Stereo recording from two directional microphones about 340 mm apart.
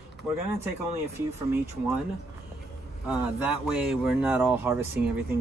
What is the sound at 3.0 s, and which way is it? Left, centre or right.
Speech, centre.